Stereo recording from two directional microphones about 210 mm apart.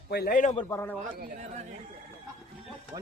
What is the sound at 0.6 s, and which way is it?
Speech, 10° left (ahead or behind).